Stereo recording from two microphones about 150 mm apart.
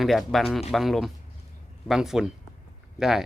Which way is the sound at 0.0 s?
Centre (ahead or behind).